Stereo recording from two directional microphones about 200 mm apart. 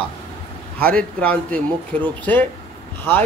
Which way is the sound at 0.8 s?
5° left (ahead or behind).